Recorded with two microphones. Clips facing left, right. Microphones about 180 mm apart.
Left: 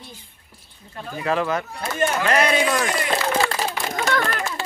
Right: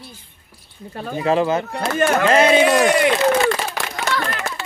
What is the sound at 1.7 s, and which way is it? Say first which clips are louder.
Speech: right 5 dB; 70° right (ahead or behind).